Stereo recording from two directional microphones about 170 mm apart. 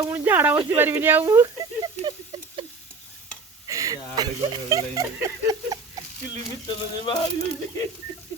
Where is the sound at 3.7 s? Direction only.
20° right (ahead or behind).